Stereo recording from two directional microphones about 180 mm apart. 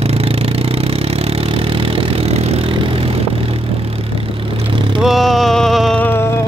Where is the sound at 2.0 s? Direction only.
35° right (ahead or behind).